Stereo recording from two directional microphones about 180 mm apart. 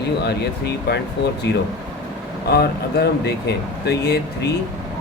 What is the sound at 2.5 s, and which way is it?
Speech, 65° left (ahead or behind).